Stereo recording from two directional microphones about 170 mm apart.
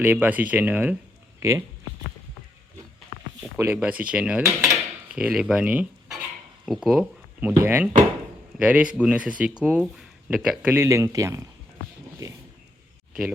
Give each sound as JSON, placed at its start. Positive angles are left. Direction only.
{"t": 0.0, "sound": "speech", "side_deg": -10}
{"t": 3.6, "sound": "cutlery", "side_deg": -10}
{"t": 6.7, "sound": "speech", "side_deg": -5}
{"t": 12.2, "sound": "a sound", "side_deg": -20}